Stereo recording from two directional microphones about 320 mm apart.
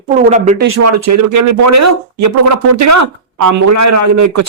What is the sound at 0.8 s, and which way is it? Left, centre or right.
Speech, right.